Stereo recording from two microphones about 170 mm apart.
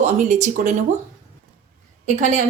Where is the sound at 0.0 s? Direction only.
45° right (ahead or behind).